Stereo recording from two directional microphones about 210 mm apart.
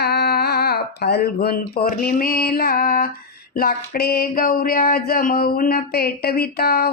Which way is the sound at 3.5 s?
45° left (ahead or behind).